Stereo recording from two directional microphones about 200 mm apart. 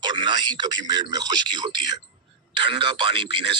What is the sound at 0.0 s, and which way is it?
A man's voice, 20° right (ahead or behind).